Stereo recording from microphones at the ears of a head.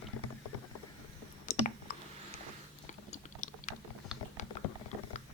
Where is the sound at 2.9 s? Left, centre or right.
Left.